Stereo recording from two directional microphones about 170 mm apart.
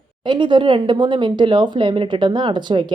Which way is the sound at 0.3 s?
30° right (ahead or behind).